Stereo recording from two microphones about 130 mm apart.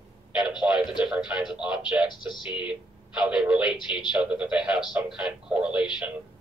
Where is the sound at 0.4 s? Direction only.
5° right (ahead or behind).